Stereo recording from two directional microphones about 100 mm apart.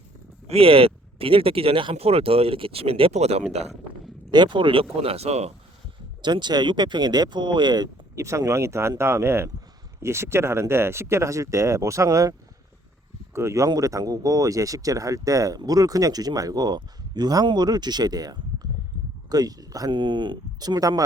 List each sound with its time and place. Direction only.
0.4 s speech: 75° right (ahead or behind); by 3.4 s 90° right
4.3 s speech: 50° right (ahead or behind); by 5.5 s 90° right
6.2 s speech: 50° right (ahead or behind)
8.1 s speech: 30° right (ahead or behind)
13.3 s speech: 30° right (ahead or behind)
19.9 s speech: 50° right (ahead or behind)